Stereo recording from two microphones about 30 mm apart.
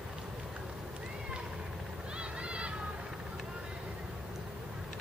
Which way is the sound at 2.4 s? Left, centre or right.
Right.